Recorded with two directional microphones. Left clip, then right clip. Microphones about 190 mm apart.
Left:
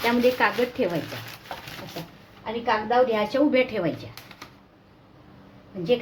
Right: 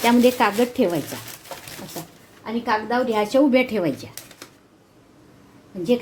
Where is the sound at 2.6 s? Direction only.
45° right (ahead or behind).